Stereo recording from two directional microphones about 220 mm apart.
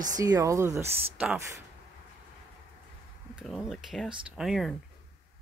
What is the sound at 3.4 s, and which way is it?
Speech, centre (ahead or behind).